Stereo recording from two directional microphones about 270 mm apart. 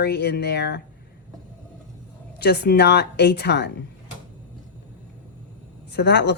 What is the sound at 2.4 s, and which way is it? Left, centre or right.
A woman's voice, left.